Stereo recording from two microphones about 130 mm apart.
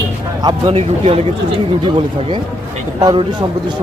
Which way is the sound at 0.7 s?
50° right (ahead or behind).